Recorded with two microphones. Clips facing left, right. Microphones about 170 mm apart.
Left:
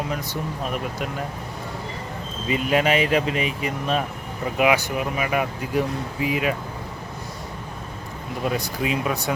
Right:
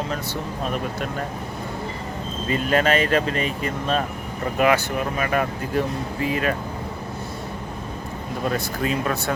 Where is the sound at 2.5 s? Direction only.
10° left (ahead or behind).